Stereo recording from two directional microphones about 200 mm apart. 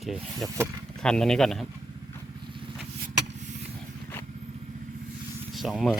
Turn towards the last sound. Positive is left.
turn(degrees=0)  # may be behind; listen again after turning